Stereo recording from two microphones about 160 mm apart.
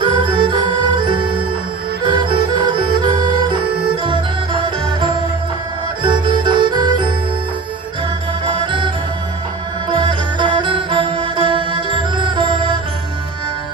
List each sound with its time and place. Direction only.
0.0 s music: 30° right (ahead or behind)
8.5 s music: 30° right (ahead or behind)